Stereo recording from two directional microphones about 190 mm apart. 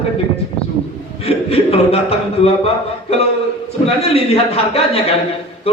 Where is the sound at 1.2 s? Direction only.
30° left (ahead or behind).